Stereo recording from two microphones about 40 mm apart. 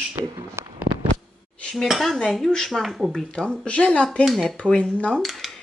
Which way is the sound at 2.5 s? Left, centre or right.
Centre.